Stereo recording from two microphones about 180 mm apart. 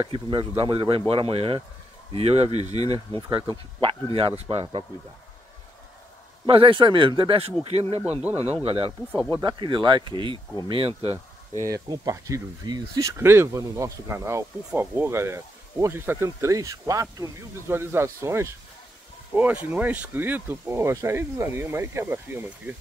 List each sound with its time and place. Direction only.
0.0 s speech: 25° right (ahead or behind)
2.8 s speech: 20° left (ahead or behind)
3.2 s speech: 25° right (ahead or behind)
6.4 s speech: 30° right (ahead or behind)
8.6 s speech: 35° right (ahead or behind)
9.1 s speech: 10° left (ahead or behind)
9.4 s speech: 25° right (ahead or behind)
11.6 s speech: 20° right (ahead or behind)